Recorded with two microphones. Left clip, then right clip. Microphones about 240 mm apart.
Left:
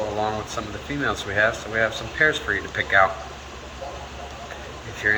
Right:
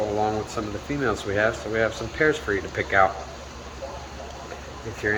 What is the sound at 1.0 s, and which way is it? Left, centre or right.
Speech, right.